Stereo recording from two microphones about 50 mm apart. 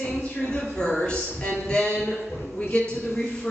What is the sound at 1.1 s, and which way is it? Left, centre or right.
A woman's voice, left.